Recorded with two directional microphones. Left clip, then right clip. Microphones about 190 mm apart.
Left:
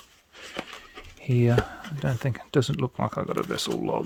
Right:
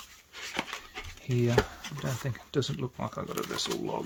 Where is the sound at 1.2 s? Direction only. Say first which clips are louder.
Left 3 dB; 50° left (ahead or behind).